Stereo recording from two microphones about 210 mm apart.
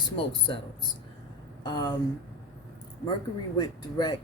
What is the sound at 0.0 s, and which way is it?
Speech, 25° left (ahead or behind).